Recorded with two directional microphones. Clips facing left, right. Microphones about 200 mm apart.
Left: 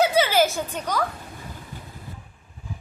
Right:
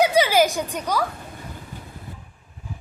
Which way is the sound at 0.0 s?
15° right (ahead or behind).